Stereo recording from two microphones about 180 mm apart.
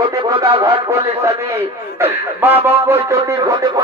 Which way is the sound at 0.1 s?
20° right (ahead or behind).